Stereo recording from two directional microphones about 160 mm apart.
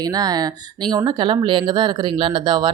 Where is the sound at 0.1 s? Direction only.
25° right (ahead or behind).